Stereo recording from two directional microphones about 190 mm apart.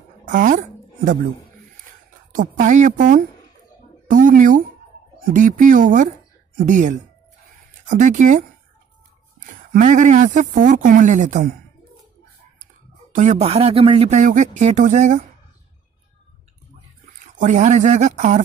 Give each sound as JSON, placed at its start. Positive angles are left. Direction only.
{"t": 0.3, "sound": "a woman's voice", "side_deg": -45}
{"t": 2.3, "sound": "speech", "side_deg": -45}
{"t": 9.7, "sound": "speech", "side_deg": -40}
{"t": 13.1, "sound": "speech", "side_deg": -40}
{"t": 17.4, "sound": "speech", "side_deg": -40}